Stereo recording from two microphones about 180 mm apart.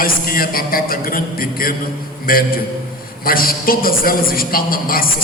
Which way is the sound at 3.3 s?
55° left (ahead or behind).